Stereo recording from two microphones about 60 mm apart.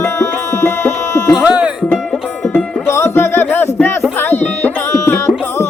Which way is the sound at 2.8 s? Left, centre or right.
Left.